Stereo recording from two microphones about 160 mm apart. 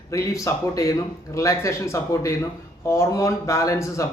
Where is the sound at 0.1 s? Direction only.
20° left (ahead or behind).